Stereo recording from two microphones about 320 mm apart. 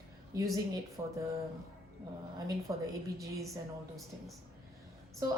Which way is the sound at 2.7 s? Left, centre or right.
Centre.